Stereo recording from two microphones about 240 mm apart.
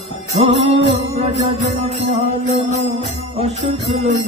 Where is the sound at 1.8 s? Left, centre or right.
Right.